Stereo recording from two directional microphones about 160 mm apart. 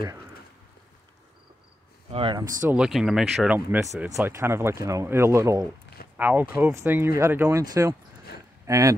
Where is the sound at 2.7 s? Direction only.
5° right (ahead or behind).